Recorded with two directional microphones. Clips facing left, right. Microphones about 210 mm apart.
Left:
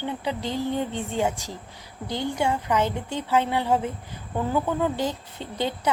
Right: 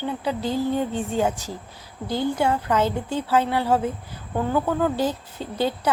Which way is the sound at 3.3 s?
20° left (ahead or behind).